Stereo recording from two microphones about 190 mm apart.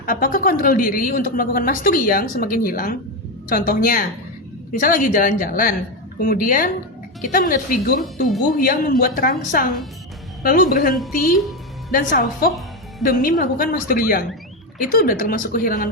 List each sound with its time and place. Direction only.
0.0 s a woman's voice: 45° left (ahead or behind)